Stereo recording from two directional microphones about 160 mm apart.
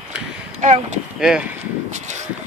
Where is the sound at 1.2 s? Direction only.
5° right (ahead or behind).